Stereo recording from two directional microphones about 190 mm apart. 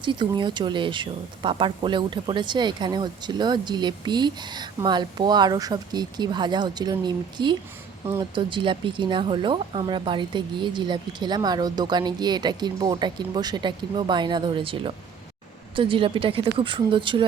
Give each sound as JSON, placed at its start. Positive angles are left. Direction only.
{"t": 0.0, "sound": "speech", "side_deg": -25}